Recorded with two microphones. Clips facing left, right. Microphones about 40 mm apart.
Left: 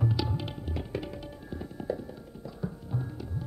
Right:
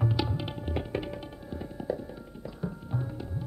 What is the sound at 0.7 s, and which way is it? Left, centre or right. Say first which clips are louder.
Music: right 3 dB; right.